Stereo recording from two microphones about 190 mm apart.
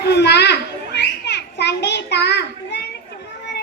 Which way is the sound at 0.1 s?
60° left (ahead or behind).